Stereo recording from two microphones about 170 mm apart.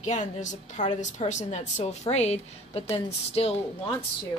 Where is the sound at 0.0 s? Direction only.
45° left (ahead or behind).